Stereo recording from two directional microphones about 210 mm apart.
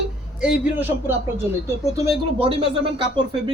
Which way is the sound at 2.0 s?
20° right (ahead or behind).